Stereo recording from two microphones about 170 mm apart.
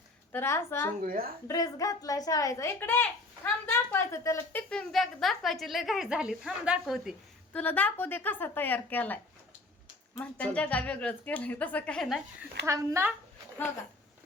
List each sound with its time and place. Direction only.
0.3 s speech: 15° left (ahead or behind)
1.0 s a woman's voice: 60° right (ahead or behind)
1.5 s a woman's voice: 20° left (ahead or behind)
4.7 s a woman's voice: 5° left (ahead or behind)
7.5 s speech: 10° left (ahead or behind)
12.6 s speech: 15° right (ahead or behind)